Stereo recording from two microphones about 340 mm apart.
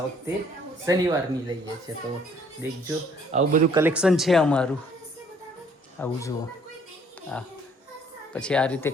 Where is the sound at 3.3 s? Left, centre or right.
Right.